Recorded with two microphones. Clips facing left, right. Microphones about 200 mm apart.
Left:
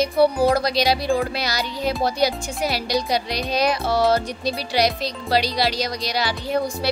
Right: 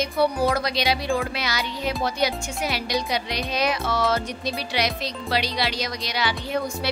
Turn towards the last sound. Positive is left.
turn(degrees=35)  # may be behind; listen again after turning